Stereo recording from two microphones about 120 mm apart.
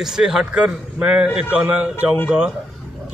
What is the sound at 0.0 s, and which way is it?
A man's voice, 5° right (ahead or behind).